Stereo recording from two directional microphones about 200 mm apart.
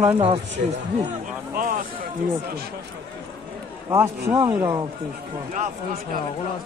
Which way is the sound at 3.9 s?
10° right (ahead or behind).